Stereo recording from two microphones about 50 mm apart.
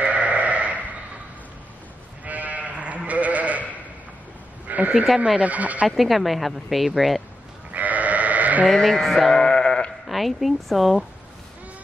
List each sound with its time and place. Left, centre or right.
0.0 s sheep: right
2.2 s sheep: right
4.6 s a sound: right
5.2 s speech: right
5.9 s a woman's voice: centre
7.7 s sheep: right
8.6 s sheep: centre
10.0 s a woman's voice: centre